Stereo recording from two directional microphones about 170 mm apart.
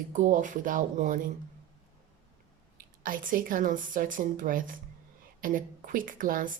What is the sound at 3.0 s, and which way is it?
A woman's voice, 55° right (ahead or behind).